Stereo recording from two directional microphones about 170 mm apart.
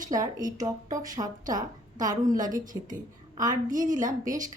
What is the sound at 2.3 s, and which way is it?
A woman's voice, 50° right (ahead or behind).